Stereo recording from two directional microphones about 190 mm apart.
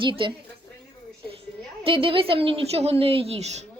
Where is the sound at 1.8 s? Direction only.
30° right (ahead or behind).